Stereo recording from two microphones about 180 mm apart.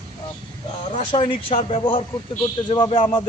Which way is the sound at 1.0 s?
35° left (ahead or behind).